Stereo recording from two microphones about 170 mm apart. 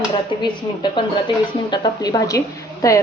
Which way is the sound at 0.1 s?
25° left (ahead or behind).